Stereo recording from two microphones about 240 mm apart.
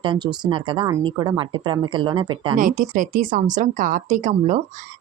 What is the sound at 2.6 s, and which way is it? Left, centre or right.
A woman's voice, right.